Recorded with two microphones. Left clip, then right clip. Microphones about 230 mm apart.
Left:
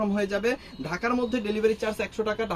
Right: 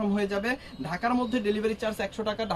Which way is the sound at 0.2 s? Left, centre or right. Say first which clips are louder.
Left 2 dB; centre.